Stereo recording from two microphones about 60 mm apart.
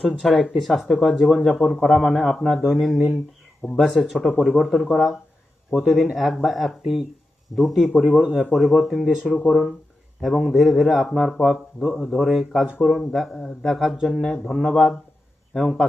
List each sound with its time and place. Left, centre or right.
0.3 s speech: centre
0.6 s speech: centre
8.2 s speech: right
8.5 s speech: centre
9.1 s speech: centre
9.5 s speech: centre